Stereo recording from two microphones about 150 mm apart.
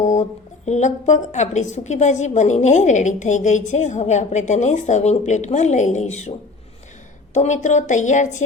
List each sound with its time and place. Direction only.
0.0 s a woman's voice: 50° left (ahead or behind)
7.3 s a woman's voice: 55° left (ahead or behind)